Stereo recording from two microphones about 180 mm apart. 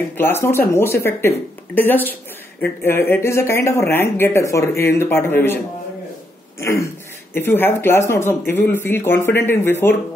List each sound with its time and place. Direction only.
0.2 s speech: 15° left (ahead or behind)
6.6 s speech: 15° left (ahead or behind)